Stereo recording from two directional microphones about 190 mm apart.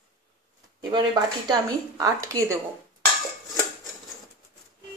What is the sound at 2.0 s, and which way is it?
Speech, 15° right (ahead or behind).